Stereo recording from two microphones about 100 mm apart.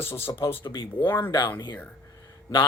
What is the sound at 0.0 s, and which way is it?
Speech, 25° left (ahead or behind).